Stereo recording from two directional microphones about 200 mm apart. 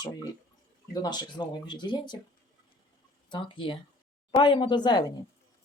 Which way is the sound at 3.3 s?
25° left (ahead or behind).